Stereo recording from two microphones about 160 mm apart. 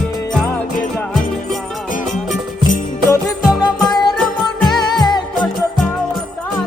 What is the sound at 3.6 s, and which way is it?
Music, 25° left (ahead or behind).